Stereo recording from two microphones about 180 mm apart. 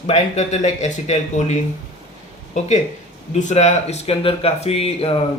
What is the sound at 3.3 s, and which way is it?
Speech, 40° left (ahead or behind).